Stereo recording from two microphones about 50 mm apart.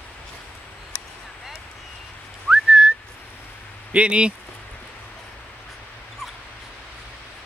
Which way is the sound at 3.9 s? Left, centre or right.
Right.